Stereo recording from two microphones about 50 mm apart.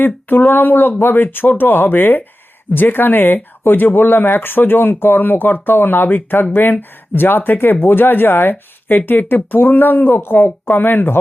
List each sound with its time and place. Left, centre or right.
0.0 s speech: left